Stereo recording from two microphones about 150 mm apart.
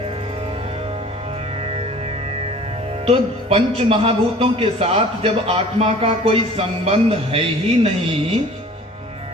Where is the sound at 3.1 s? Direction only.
40° right (ahead or behind).